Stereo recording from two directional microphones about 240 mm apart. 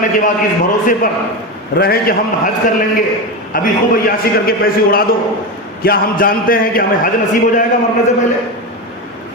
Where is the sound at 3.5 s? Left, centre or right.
Left.